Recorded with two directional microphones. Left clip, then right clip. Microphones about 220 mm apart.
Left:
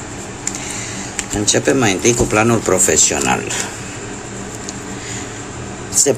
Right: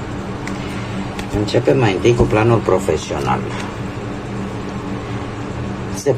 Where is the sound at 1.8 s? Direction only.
30° left (ahead or behind).